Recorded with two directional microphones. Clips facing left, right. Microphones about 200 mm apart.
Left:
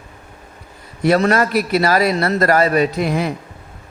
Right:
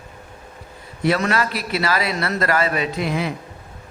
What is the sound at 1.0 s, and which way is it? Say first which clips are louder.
A man's voice: left 5 dB; 45° left (ahead or behind).